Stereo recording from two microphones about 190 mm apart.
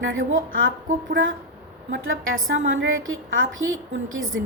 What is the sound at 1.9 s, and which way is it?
A woman's voice, 90° right.